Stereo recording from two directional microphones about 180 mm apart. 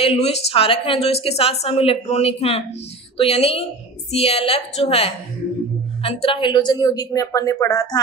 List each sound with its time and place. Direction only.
0.0 s a woman's voice: 35° left (ahead or behind)